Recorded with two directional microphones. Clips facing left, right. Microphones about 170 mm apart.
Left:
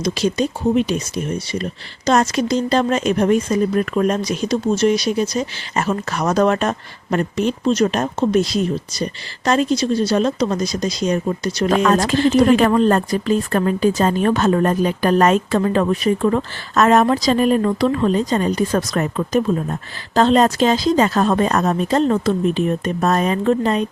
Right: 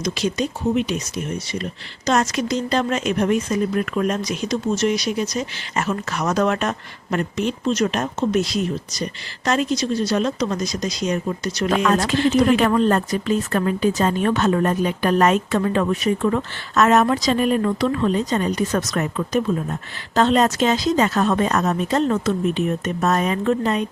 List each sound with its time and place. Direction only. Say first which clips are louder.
0.0 s speech: left 4 dB; 35° left (ahead or behind)